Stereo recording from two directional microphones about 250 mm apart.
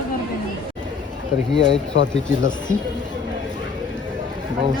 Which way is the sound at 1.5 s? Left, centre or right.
Centre.